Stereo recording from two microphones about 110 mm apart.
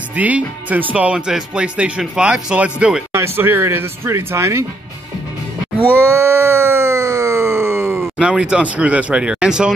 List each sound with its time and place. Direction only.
0.1 s speech: 15° right (ahead or behind)
3.1 s speech: 20° right (ahead or behind)
5.9 s a sound: 25° right (ahead or behind)
8.0 s speech: 10° right (ahead or behind)